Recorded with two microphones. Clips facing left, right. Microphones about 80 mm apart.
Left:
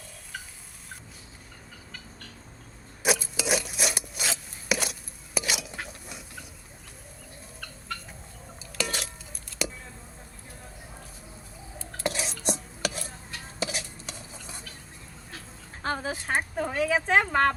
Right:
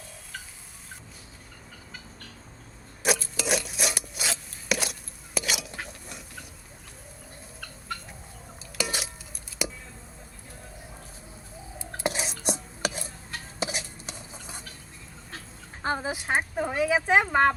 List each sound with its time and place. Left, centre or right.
3.2 s rub: centre
8.5 s a sound: centre
11.9 s stir: right
15.8 s speech: centre